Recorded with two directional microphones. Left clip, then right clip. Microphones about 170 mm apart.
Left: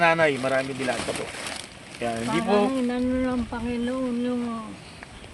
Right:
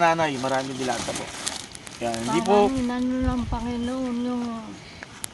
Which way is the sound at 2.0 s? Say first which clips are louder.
Right 1 dB; 5° left (ahead or behind).